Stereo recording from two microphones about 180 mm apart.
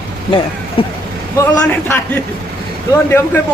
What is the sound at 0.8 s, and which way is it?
Speech, 30° left (ahead or behind).